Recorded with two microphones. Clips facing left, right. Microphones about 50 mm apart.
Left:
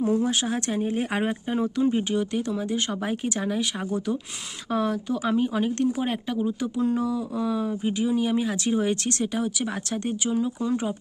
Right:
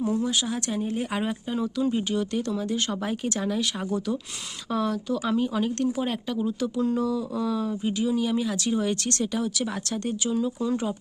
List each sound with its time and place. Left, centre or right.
0.0 s speech: left; by 10.9 s centre